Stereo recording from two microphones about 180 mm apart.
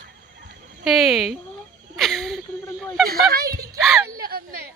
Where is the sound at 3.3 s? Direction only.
55° right (ahead or behind).